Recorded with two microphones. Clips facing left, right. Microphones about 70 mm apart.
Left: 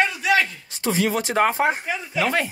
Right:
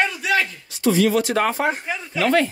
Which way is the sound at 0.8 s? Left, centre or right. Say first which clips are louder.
Right 5 dB; left.